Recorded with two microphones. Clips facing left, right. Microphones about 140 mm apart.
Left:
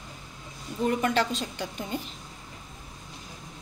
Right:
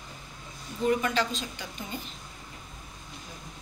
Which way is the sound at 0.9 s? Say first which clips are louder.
Left 1 dB; 55° left (ahead or behind).